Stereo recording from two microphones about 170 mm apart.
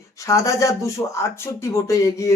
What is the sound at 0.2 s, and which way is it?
Speech, 20° left (ahead or behind).